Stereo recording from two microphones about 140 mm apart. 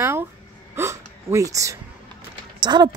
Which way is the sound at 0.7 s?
20° right (ahead or behind).